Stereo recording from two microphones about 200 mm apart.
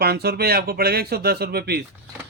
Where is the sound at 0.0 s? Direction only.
50° right (ahead or behind).